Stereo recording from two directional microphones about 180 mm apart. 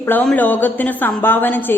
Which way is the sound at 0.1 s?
10° left (ahead or behind).